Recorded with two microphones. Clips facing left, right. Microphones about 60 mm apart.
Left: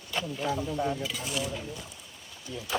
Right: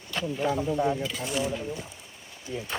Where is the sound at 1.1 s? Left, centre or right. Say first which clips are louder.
Right 3 dB; centre.